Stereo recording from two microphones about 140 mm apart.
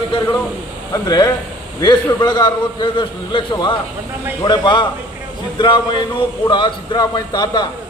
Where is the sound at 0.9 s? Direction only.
30° left (ahead or behind).